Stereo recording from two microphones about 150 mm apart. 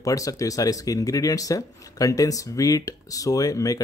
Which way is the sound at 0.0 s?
20° left (ahead or behind).